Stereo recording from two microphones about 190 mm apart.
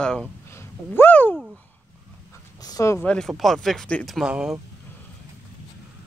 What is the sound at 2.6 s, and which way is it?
Speech, 20° left (ahead or behind).